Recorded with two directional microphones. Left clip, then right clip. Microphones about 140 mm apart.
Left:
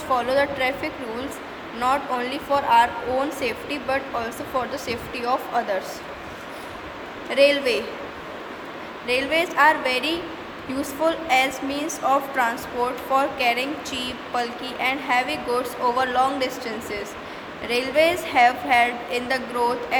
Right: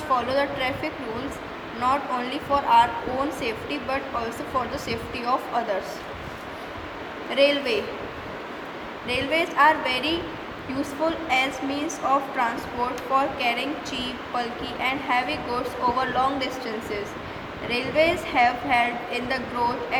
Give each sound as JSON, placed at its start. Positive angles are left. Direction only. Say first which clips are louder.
{"t": 0.1, "sound": "speech", "louder": "left 2 dB", "side_deg": 35}
{"t": 7.3, "sound": "speech", "louder": "left 3 dB", "side_deg": 30}
{"t": 9.0, "sound": "speech", "louder": "left 3 dB", "side_deg": 35}